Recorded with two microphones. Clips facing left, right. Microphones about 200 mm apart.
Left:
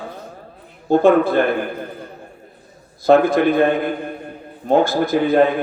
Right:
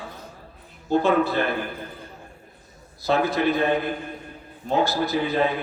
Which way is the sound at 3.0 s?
50° left (ahead or behind).